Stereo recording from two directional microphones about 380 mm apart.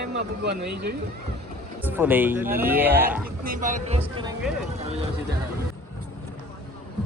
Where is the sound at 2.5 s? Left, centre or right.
Right.